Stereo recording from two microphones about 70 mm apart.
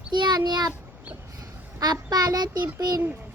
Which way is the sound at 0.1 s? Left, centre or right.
Right.